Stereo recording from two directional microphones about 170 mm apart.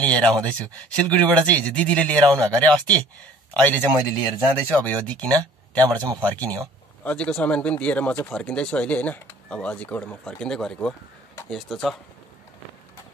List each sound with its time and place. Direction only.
0.0 s speech: 5° left (ahead or behind)
2.2 s speech: 20° right (ahead or behind)
2.6 s speech: 5° left (ahead or behind)